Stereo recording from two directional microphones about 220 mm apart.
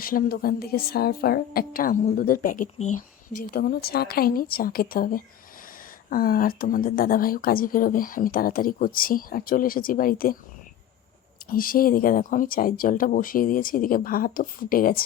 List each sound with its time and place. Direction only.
0.0 s a woman's voice: 40° left (ahead or behind)
3.5 s a woman's voice: 45° left (ahead or behind)
11.4 s a woman's voice: 40° left (ahead or behind)